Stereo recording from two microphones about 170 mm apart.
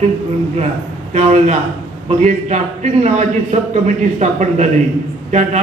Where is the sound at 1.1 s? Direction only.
40° right (ahead or behind).